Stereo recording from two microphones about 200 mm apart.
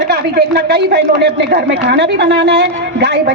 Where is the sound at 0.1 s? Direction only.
55° right (ahead or behind).